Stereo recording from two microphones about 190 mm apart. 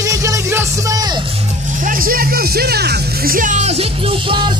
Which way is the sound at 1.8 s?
45° right (ahead or behind).